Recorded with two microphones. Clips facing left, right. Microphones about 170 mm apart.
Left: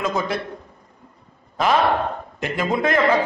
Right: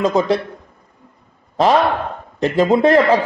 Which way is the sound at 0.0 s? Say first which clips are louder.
Right 8 dB; 35° right (ahead or behind).